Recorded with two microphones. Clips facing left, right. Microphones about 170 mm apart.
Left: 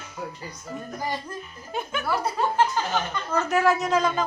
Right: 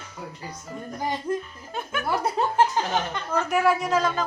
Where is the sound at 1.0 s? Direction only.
20° right (ahead or behind).